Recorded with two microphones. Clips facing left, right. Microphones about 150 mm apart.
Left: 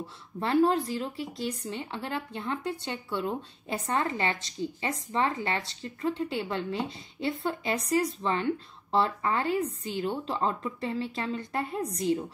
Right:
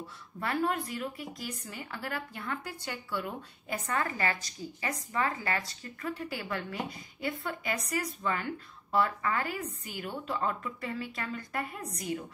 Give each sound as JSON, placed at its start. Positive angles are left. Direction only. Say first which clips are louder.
{"t": 0.4, "sound": "speech", "louder": "left 7 dB", "side_deg": 30}